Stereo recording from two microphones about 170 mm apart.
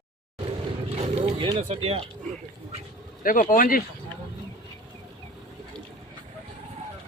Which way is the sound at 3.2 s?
50° left (ahead or behind).